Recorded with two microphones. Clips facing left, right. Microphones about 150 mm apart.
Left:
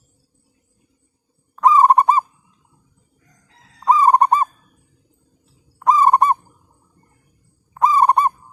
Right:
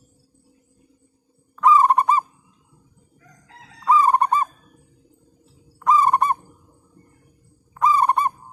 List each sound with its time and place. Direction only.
1.5 s fowl: 40° left (ahead or behind)
3.2 s chicken: 90° right
3.8 s fowl: 35° left (ahead or behind)
5.8 s bird vocalization: 35° left (ahead or behind)
7.7 s fowl: 35° left (ahead or behind)